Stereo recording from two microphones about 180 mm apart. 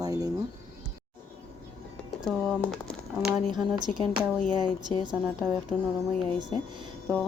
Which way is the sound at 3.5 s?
25° right (ahead or behind).